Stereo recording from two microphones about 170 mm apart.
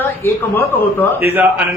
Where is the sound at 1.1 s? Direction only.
10° right (ahead or behind).